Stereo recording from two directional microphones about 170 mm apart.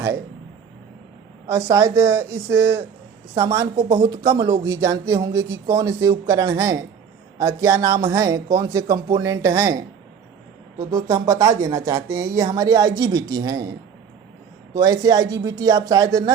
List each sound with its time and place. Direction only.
1.5 s speech: 20° right (ahead or behind)
10.8 s speech: 20° right (ahead or behind)